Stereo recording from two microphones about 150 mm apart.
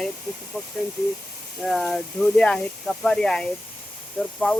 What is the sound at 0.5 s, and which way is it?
Speech, 10° right (ahead or behind).